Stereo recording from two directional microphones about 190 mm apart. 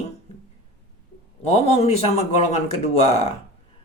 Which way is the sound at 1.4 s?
35° left (ahead or behind).